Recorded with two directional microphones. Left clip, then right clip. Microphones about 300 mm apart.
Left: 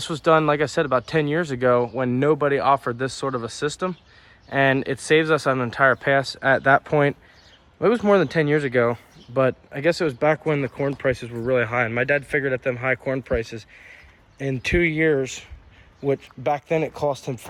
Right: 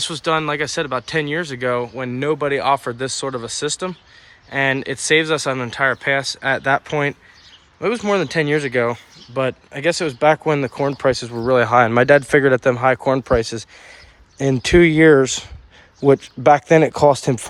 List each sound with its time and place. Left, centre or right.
0.0 s speech: centre
14.9 s speech: right